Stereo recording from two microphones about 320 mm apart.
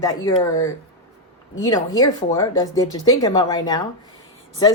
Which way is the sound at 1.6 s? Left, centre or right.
Centre.